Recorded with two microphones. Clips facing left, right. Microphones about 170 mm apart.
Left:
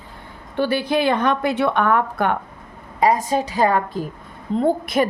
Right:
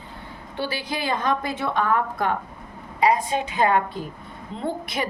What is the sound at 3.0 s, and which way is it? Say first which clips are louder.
A woman's voice: left 3 dB; 45° left (ahead or behind).